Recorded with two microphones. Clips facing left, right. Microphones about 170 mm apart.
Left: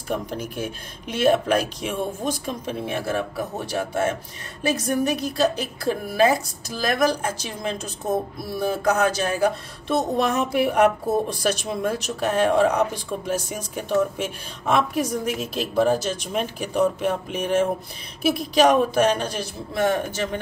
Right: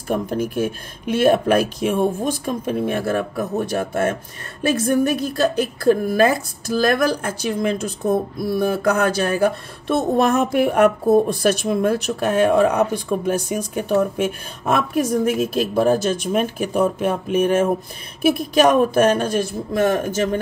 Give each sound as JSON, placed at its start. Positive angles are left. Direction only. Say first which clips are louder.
{"t": 0.1, "sound": "speech", "louder": "right 6 dB", "side_deg": -50}